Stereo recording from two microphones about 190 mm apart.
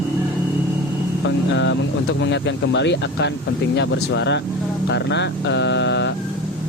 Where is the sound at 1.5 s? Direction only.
75° left (ahead or behind).